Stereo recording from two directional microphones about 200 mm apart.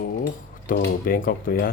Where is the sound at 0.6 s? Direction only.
45° left (ahead or behind).